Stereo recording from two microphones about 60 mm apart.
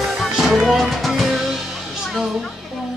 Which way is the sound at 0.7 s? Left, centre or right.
Centre.